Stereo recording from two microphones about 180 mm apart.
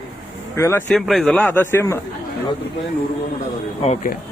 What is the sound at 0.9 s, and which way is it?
Speech, centre (ahead or behind).